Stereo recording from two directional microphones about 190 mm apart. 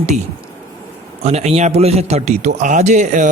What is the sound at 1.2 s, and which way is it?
A man's voice, 35° right (ahead or behind).